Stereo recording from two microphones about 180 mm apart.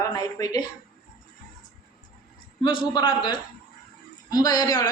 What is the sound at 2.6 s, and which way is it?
A woman's voice, 25° left (ahead or behind).